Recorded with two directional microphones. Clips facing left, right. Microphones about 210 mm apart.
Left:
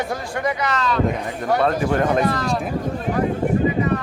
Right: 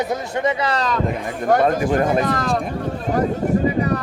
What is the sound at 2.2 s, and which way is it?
Speech, 50° right (ahead or behind).